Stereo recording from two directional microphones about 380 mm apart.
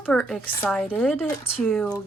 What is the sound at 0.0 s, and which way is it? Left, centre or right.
A woman's voice, centre.